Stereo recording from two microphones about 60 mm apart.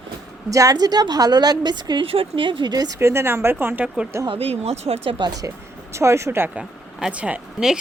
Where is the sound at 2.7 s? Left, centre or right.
Right.